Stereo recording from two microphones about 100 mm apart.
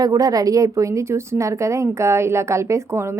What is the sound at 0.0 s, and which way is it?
A woman's voice, 35° right (ahead or behind).